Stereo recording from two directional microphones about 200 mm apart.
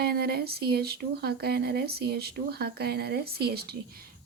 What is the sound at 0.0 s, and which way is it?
Speech, 50° right (ahead or behind).